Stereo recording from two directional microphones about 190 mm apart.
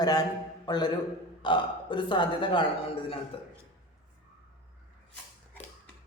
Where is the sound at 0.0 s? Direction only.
20° left (ahead or behind).